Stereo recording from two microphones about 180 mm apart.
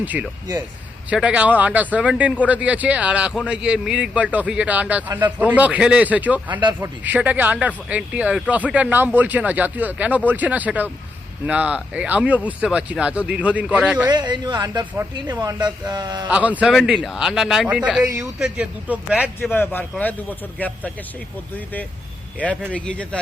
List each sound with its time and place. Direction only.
0.0 s speech: 10° right (ahead or behind)
14.1 s speech: 25° right (ahead or behind)
16.3 s a man's voice: 5° right (ahead or behind)
19.4 s speech: 10° left (ahead or behind)
22.7 s speech: 5° left (ahead or behind)